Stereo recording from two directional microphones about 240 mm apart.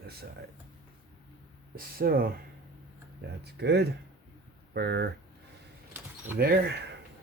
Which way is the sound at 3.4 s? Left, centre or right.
Right.